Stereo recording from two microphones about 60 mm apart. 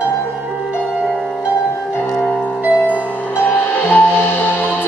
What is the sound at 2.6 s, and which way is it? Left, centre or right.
Music, right.